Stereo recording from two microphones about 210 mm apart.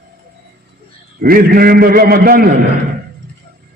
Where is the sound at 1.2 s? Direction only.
45° right (ahead or behind).